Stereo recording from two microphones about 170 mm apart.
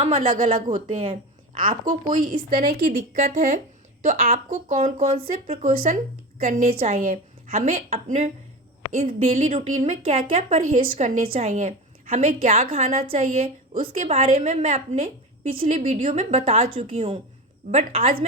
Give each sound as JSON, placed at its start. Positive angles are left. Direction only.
{"t": 0.0, "sound": "a woman's voice", "side_deg": -40}
{"t": 1.5, "sound": "a woman's voice", "side_deg": -50}
{"t": 2.5, "sound": "a woman's voice", "side_deg": -35}
{"t": 2.8, "sound": "a woman's voice", "side_deg": -50}
{"t": 4.0, "sound": "a woman's voice", "side_deg": -40}